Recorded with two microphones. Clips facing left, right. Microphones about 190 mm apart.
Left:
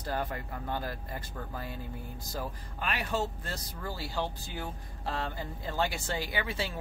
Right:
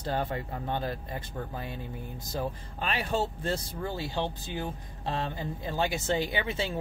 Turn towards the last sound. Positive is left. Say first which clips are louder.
# right 3 dB
turn(degrees=-20)  # may be behind; listen again after turning